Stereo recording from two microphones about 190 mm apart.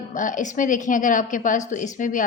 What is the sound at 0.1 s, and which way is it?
A woman's voice, 40° left (ahead or behind).